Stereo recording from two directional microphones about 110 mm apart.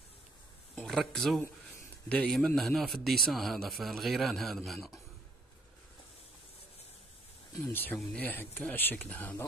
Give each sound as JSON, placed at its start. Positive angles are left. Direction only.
{"t": 0.7, "sound": "a man's voice", "side_deg": 0}
{"t": 7.6, "sound": "speech", "side_deg": 15}